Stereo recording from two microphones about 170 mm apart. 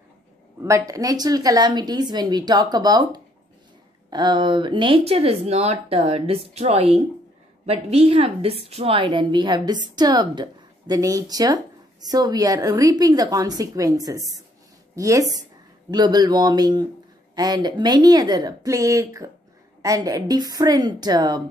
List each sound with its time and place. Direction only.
0.6 s a woman's voice: 20° right (ahead or behind)